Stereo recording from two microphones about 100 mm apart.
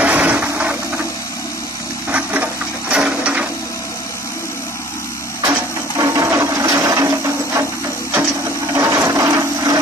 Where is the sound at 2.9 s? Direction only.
10° right (ahead or behind).